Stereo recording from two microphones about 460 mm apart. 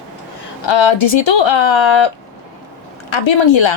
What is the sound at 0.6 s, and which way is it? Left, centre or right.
Speech, left.